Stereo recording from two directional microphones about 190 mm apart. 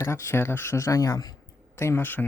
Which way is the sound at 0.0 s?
15° left (ahead or behind).